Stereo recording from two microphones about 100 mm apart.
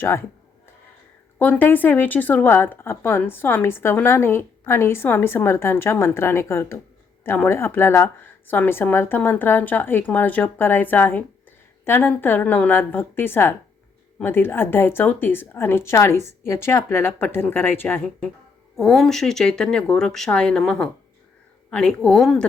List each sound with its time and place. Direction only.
0.0 s speech: 25° left (ahead or behind)
1.4 s speech: 15° left (ahead or behind)
18.8 s speech: 5° left (ahead or behind)